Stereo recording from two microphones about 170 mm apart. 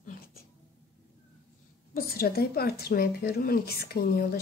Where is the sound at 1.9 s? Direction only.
60° left (ahead or behind).